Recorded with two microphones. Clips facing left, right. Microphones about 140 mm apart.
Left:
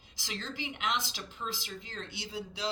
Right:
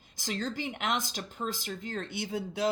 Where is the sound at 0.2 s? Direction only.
45° right (ahead or behind).